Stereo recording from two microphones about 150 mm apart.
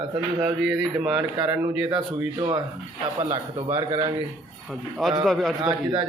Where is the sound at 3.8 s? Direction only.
35° right (ahead or behind).